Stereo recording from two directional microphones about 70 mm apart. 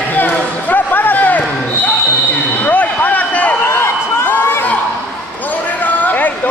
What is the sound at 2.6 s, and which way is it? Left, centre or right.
Basketball bounce, left.